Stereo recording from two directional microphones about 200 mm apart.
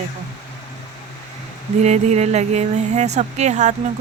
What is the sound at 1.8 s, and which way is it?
Speech, 35° right (ahead or behind).